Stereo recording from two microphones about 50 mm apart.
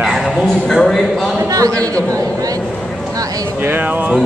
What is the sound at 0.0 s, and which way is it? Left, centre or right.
A man's voice, centre.